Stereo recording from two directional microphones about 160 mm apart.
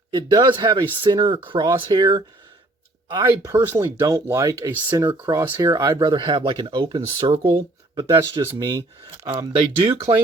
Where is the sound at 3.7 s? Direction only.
15° right (ahead or behind).